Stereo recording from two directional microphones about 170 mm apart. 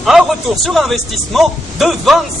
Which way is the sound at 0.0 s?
Centre (ahead or behind).